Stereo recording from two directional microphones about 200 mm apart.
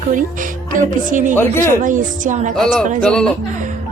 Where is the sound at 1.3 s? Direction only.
10° left (ahead or behind).